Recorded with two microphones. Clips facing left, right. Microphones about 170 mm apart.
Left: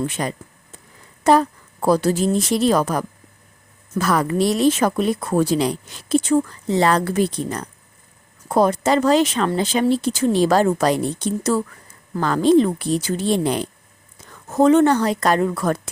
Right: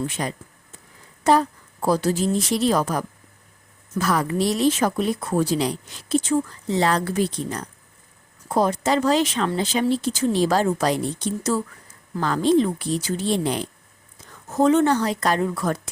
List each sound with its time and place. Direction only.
0.2 s speech: 60° left (ahead or behind)
1.8 s speech: 65° left (ahead or behind)